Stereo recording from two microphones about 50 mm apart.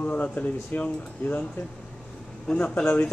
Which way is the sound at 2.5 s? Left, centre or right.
Left.